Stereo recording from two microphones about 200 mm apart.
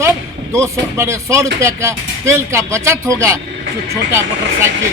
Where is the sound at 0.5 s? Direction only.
15° right (ahead or behind).